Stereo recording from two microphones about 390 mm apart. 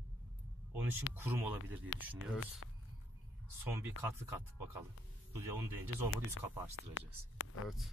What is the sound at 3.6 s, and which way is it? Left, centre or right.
Speech, centre.